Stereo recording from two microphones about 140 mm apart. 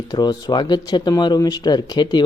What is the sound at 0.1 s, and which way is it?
Speech, 30° left (ahead or behind).